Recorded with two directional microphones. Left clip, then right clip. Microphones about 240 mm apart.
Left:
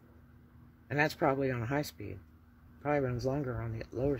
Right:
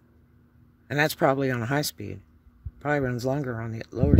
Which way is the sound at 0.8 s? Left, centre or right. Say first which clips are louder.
Right 7 dB; right.